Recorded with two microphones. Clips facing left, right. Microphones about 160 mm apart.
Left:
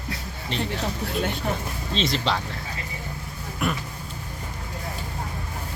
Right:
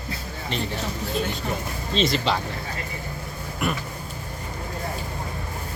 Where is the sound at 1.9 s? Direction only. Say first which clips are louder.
Right 2 dB; centre (ahead or behind).